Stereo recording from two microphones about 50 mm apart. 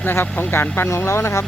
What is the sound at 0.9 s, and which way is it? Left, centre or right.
Speech, left.